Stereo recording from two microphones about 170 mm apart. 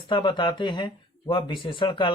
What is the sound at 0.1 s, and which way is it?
Speech, 30° left (ahead or behind).